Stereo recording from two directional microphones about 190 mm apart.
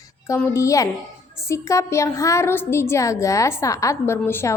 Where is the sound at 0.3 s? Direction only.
15° left (ahead or behind).